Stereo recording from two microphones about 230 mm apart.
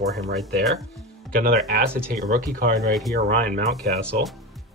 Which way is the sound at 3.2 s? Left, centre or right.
Right.